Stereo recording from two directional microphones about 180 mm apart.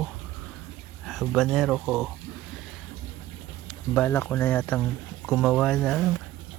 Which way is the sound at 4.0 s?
10° left (ahead or behind).